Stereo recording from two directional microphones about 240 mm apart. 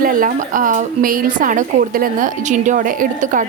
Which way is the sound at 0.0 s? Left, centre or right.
Right.